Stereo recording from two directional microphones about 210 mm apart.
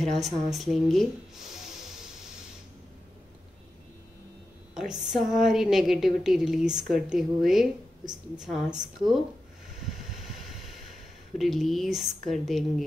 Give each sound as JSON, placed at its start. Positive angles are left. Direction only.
{"t": 0.2, "sound": "a woman's voice", "side_deg": 0}
{"t": 4.7, "sound": "a woman's voice", "side_deg": 0}
{"t": 11.3, "sound": "a woman's voice", "side_deg": 0}